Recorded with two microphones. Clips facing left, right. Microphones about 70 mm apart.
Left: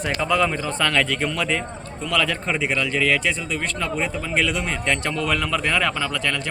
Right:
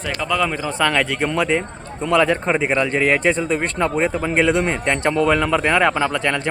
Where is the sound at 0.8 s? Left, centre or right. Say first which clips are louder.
Right 3 dB; centre.